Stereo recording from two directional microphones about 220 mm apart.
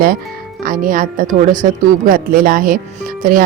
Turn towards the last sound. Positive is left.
turn(degrees=-40)  # may be behind; listen again after turning